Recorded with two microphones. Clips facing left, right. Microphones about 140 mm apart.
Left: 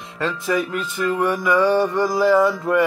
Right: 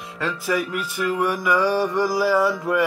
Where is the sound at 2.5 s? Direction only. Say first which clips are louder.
Left 3 dB; 15° right (ahead or behind).